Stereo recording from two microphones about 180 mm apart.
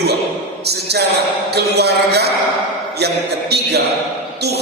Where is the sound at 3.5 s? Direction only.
65° right (ahead or behind).